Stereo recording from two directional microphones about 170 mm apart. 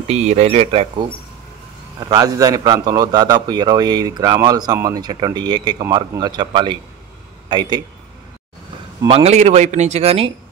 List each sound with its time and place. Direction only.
0.1 s a man's voice: 40° right (ahead or behind); by 7.8 s 25° right (ahead or behind)
9.0 s a man's voice: 35° right (ahead or behind)